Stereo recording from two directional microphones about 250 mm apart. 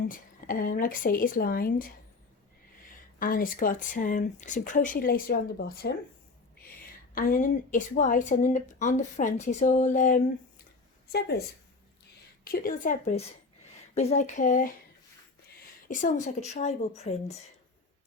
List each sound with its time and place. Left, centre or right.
0.1 s a woman's voice: left
3.2 s a woman's voice: left
7.1 s a woman's voice: left
12.5 s a woman's voice: left
15.9 s speech: left